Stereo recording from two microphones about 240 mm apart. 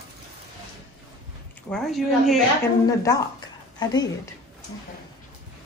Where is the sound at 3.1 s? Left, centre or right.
Centre.